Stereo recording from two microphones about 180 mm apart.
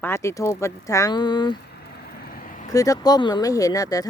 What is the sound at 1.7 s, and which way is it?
Vehicle, 60° left (ahead or behind).